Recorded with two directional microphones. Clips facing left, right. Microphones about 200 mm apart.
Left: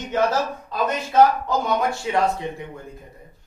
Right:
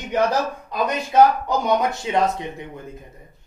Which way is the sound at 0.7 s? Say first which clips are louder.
Right 1 dB; 15° right (ahead or behind).